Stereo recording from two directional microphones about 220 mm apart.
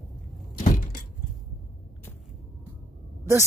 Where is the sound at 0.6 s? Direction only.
40° left (ahead or behind).